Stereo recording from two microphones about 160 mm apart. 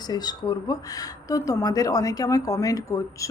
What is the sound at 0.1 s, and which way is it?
Speech, 25° left (ahead or behind).